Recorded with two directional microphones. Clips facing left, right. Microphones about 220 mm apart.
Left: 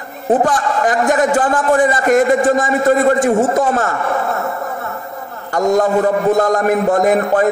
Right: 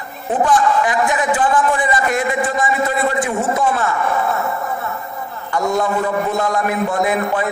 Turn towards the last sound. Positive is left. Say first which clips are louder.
# left 5 dB
turn(degrees=45)  # may be behind; listen again after turning